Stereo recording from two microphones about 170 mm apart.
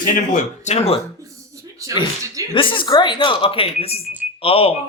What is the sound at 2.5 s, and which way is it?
Speech, 30° left (ahead or behind).